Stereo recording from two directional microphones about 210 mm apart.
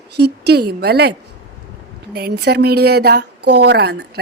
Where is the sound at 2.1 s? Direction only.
50° right (ahead or behind).